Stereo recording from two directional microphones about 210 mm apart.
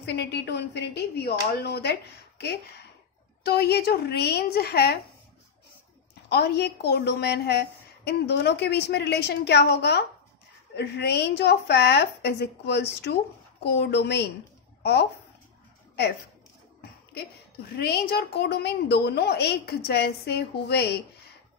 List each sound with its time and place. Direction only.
0.0 s a woman's voice: 55° left (ahead or behind)
6.2 s a woman's voice: 50° left (ahead or behind)
17.7 s a woman's voice: 50° left (ahead or behind)